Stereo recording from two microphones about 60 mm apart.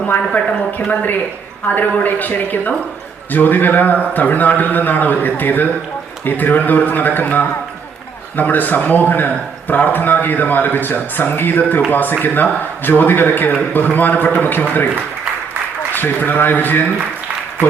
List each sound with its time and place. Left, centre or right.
0.3 s a woman's voice: left
15.9 s speech: left